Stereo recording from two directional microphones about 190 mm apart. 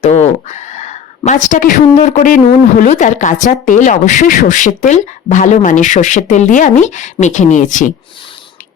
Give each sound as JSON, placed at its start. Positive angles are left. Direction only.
{"t": 0.0, "sound": "a woman's voice", "side_deg": 35}